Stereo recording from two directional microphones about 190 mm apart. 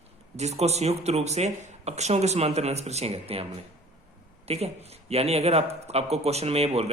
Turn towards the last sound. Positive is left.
turn(degrees=-35)  # may be behind; listen again after turning